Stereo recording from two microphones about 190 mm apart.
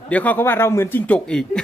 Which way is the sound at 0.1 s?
10° left (ahead or behind).